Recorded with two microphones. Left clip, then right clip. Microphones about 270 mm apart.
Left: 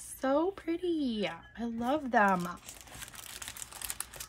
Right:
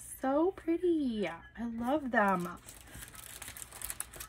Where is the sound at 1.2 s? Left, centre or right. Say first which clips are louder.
Left 1 dB; centre.